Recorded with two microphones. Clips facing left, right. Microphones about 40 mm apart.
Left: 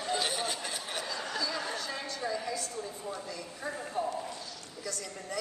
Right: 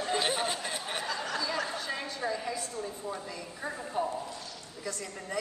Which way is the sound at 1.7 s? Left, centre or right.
Right.